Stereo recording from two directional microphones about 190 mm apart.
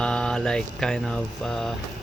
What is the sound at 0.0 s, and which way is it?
Mantra, 5° left (ahead or behind).